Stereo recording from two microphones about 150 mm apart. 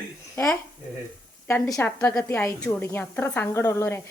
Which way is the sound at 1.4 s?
15° left (ahead or behind).